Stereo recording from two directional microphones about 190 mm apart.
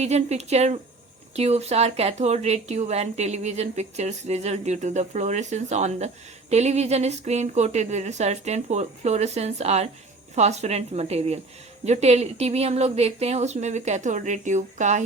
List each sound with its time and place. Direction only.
0.0 s speech: 35° right (ahead or behind)